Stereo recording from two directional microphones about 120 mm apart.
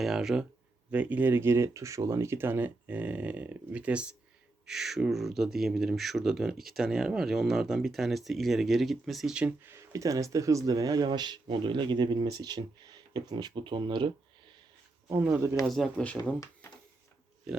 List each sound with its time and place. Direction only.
0.0 s speech: 5° right (ahead or behind)
9.6 s speech: 25° right (ahead or behind); by 14.1 s 40° right (ahead or behind)
15.1 s speech: 20° right (ahead or behind)
15.6 s speech: centre (ahead or behind)
16.0 s speech: 15° left (ahead or behind)